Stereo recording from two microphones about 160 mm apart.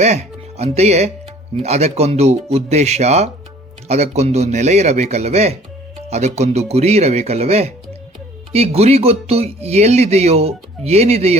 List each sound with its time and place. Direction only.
0.0 s speech: 40° right (ahead or behind)